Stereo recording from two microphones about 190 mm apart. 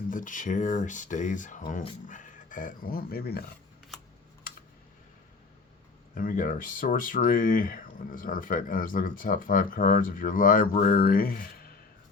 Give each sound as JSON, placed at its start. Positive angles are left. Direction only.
{"t": 0.1, "sound": "speech", "side_deg": 45}
{"t": 6.1, "sound": "speech", "side_deg": 45}